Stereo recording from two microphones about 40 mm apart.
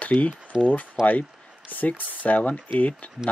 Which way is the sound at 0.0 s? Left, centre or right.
Left.